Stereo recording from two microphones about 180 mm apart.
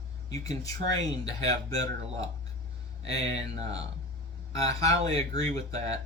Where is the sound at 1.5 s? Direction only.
20° left (ahead or behind).